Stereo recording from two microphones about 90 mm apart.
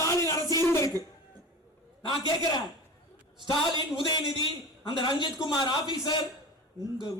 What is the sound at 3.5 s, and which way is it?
Speech, 60° left (ahead or behind).